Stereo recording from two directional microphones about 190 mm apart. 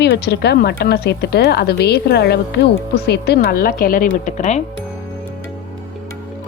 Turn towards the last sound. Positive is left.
turn(degrees=40)  # may be behind; listen again after turning